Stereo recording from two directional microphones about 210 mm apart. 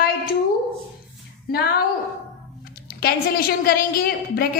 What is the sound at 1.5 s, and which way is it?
Speech, 50° left (ahead or behind).